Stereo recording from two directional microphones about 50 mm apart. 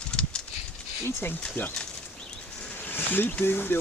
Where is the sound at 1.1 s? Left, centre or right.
Left.